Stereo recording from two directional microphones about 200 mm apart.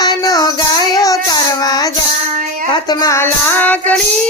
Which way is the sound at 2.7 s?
20° left (ahead or behind).